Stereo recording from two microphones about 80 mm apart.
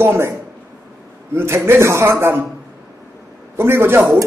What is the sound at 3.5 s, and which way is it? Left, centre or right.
Speech, right.